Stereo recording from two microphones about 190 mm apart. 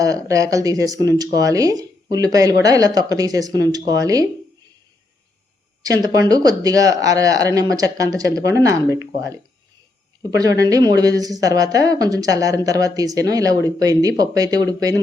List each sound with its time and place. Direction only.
0.0 s speech: 20° right (ahead or behind)
5.8 s speech: 20° right (ahead or behind)
10.3 s speech: 20° right (ahead or behind)